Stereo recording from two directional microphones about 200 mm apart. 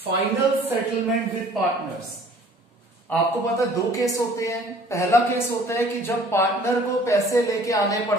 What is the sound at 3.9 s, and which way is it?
A woman's voice, 15° left (ahead or behind).